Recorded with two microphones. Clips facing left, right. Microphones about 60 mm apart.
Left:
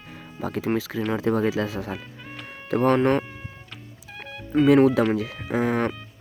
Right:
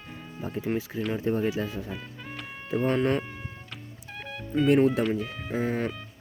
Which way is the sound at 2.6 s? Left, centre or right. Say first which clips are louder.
Left 6 dB; left.